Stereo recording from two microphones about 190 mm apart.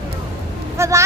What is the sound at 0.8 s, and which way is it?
Speech, 15° right (ahead or behind).